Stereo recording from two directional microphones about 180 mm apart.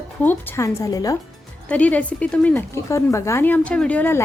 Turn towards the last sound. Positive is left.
turn(degrees=10)  # may be behind; listen again after turning